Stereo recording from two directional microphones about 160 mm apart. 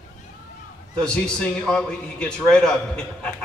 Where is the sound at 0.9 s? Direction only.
5° left (ahead or behind).